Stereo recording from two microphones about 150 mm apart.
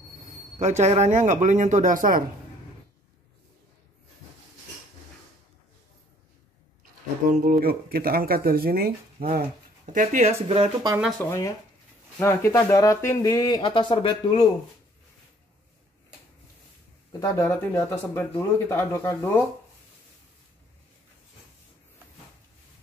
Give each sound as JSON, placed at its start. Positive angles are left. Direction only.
{"t": 0.3, "sound": "speech", "side_deg": -50}
{"t": 7.2, "sound": "speech", "side_deg": -65}
{"t": 9.9, "sound": "speech", "side_deg": -55}
{"t": 10.5, "sound": "speech", "side_deg": -30}
{"t": 11.0, "sound": "speech", "side_deg": 0}
{"t": 11.2, "sound": "speech", "side_deg": 20}
{"t": 13.7, "sound": "speech", "side_deg": 35}
{"t": 17.2, "sound": "speech", "side_deg": 20}